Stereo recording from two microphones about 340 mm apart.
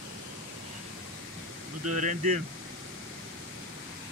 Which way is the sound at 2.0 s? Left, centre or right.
Right.